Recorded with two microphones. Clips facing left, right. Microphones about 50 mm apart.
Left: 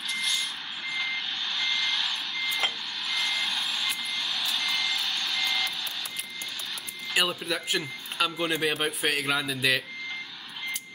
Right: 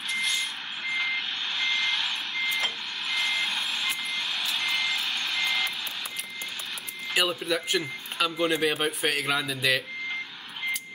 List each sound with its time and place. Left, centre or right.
0.1 s reversing beeps: centre
1.9 s vehicle: centre
3.1 s reversing beeps: centre
4.1 s vehicle: centre
4.6 s vehicle: right
7.2 s speech: centre